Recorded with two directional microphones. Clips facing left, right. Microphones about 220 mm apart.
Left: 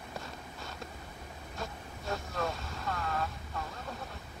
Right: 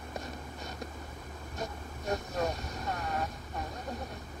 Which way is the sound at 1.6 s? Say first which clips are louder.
Right 3 dB; 15° right (ahead or behind).